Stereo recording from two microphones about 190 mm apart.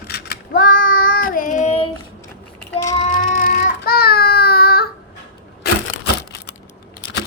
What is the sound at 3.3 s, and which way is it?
Child singing, 45° left (ahead or behind).